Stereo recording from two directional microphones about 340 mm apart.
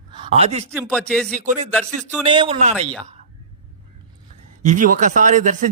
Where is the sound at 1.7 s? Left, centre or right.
Centre.